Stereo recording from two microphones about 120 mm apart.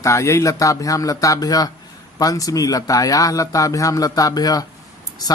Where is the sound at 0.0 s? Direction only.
25° left (ahead or behind).